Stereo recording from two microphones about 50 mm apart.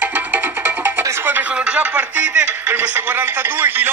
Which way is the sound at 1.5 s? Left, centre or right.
Right.